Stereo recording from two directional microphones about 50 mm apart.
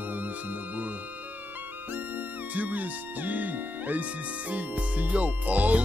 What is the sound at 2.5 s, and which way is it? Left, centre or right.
Speech, right.